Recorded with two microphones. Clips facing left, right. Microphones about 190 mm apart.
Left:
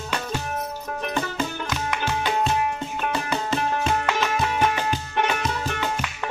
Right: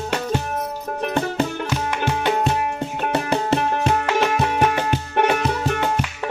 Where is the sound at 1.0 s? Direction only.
60° right (ahead or behind).